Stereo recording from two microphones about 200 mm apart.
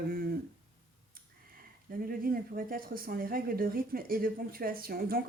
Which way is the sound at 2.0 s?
45° right (ahead or behind).